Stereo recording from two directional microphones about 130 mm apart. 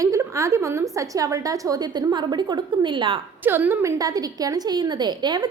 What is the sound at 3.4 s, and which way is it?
A woman's voice, 15° right (ahead or behind).